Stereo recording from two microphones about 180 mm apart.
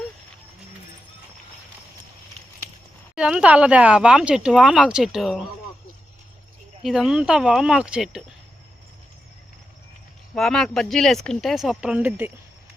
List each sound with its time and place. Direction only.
3.2 s speech: 5° right (ahead or behind)
6.8 s speech: 5° right (ahead or behind)
10.3 s speech: centre (ahead or behind)